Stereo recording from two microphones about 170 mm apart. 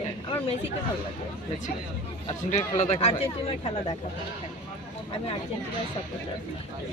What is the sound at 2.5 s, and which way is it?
Speech, 40° left (ahead or behind).